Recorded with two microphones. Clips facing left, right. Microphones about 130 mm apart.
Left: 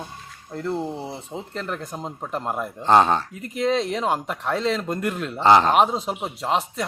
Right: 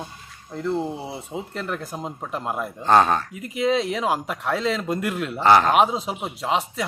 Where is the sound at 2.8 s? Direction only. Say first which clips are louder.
Left 1 dB; 20° left (ahead or behind).